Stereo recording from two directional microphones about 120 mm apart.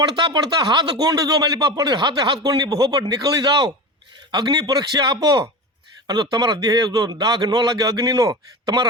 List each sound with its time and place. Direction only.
0.1 s speech: 40° right (ahead or behind)